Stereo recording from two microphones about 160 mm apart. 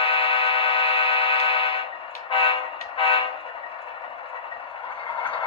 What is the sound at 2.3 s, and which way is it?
Train, 35° left (ahead or behind).